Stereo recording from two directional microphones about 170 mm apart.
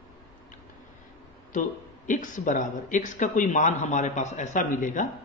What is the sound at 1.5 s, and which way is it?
Speech, 50° left (ahead or behind).